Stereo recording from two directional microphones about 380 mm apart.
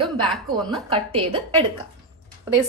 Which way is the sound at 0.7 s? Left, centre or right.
Centre.